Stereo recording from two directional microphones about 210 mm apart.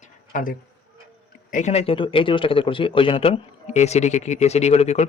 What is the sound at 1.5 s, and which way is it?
A man's voice, 35° left (ahead or behind).